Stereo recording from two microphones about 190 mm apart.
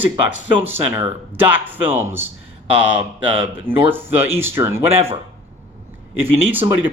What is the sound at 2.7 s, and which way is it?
Speech, 75° left (ahead or behind).